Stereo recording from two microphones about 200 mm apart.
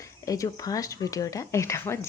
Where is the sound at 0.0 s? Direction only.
15° left (ahead or behind).